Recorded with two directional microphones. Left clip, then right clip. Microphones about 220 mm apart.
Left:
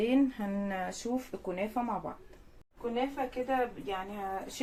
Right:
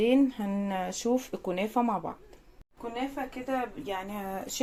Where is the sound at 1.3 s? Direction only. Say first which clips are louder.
Right 4 dB; 40° right (ahead or behind).